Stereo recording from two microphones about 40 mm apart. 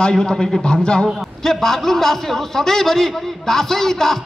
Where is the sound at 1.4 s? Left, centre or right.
Centre.